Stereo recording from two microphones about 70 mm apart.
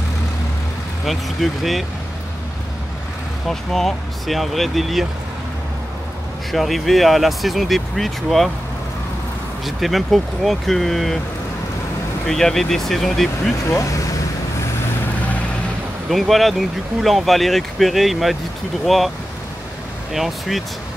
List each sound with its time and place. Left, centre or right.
1.0 s speech: centre
3.4 s speech: centre
6.5 s speech: centre
9.7 s speech: centre
12.3 s speech: centre
13.7 s speech: left
16.1 s speech: centre